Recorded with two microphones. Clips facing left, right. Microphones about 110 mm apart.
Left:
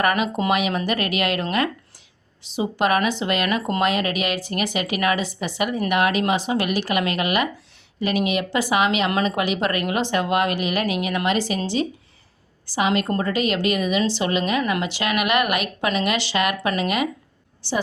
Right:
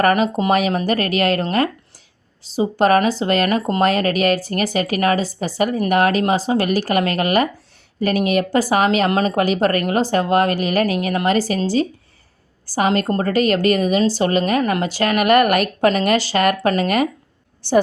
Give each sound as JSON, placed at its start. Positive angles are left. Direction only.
{"t": 0.0, "sound": "a woman's voice", "side_deg": -35}